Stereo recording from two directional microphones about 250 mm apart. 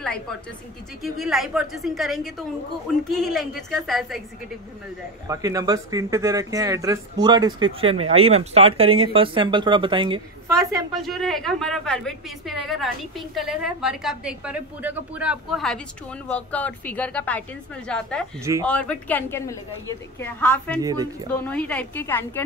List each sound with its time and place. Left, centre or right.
0.0 s a woman's voice: centre
5.3 s a woman's voice: centre
11.1 s a woman's voice: centre
18.4 s speech: centre
18.7 s speech: centre
20.8 s speech: centre
21.3 s a woman's voice: centre